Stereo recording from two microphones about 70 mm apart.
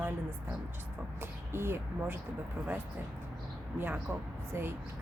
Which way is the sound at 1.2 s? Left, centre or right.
Right.